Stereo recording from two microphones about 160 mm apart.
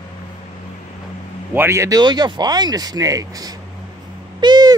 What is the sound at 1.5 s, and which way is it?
Speech, 15° right (ahead or behind).